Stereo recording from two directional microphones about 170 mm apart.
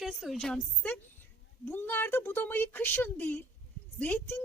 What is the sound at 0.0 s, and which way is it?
A woman's voice, centre (ahead or behind).